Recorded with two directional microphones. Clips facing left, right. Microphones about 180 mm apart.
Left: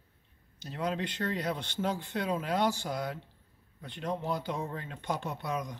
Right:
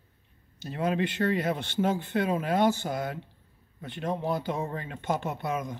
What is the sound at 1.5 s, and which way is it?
Speech, 55° right (ahead or behind).